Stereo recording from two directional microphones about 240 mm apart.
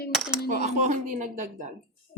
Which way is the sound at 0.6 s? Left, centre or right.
Right.